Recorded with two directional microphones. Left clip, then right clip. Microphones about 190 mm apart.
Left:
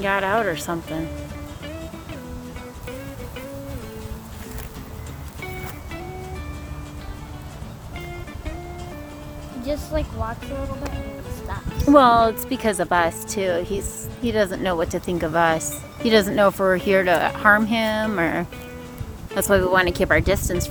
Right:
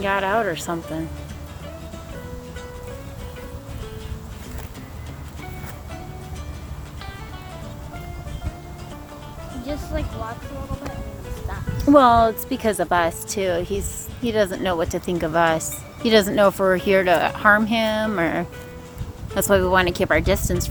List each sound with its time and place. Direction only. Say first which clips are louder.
0.0 s speech: even; centre (ahead or behind)
9.6 s speech: left 4 dB; 50° left (ahead or behind)
11.9 s speech: even; centre (ahead or behind)